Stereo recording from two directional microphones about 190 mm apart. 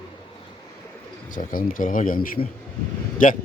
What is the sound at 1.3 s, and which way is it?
Speech, 45° left (ahead or behind).